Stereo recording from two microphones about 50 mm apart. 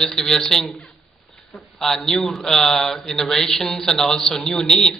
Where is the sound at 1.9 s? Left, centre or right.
Centre.